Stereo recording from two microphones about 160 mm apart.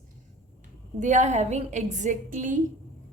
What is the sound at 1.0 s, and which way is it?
A woman's voice, 50° right (ahead or behind).